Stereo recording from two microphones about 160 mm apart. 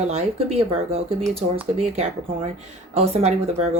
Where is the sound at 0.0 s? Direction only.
40° right (ahead or behind).